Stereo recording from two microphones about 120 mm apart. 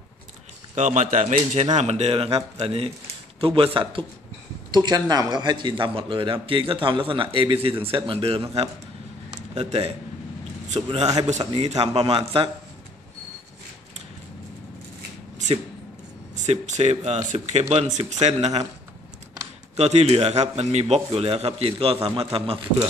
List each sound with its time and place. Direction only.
0.7 s a man's voice: 90° right; by 4.0 s 45° right (ahead or behind)
4.6 s a man's voice: 35° right (ahead or behind); by 9.9 s 60° right (ahead or behind)
10.8 s a man's voice: 45° right (ahead or behind)
11.2 s a man's voice: 65° right (ahead or behind)
16.4 s speech: 70° right (ahead or behind)
19.8 s a man's voice: 65° right (ahead or behind)